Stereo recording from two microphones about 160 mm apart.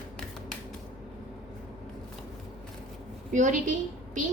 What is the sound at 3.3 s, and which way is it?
Speech, 50° right (ahead or behind).